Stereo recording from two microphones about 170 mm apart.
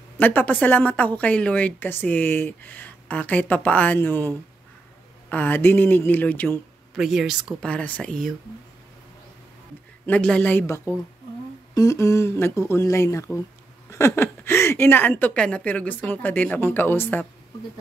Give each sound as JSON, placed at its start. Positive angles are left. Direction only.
{"t": 0.2, "sound": "a woman's voice", "side_deg": 10}
{"t": 7.0, "sound": "speech", "side_deg": 0}
{"t": 7.7, "sound": "a woman's voice", "side_deg": 10}
{"t": 10.0, "sound": "a woman's voice", "side_deg": 5}